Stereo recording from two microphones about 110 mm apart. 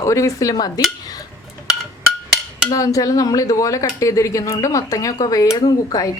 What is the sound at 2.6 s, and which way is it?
Speech, 30° left (ahead or behind).